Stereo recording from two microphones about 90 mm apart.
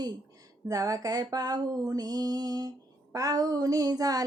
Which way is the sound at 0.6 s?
40° right (ahead or behind).